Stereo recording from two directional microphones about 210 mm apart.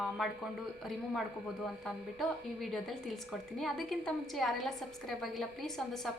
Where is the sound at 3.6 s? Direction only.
Centre (ahead or behind).